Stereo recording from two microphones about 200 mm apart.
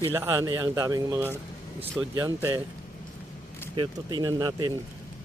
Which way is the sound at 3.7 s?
20° right (ahead or behind).